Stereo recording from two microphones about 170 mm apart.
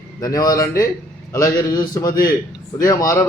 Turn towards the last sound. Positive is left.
turn(degrees=20)  # may be behind; listen again after turning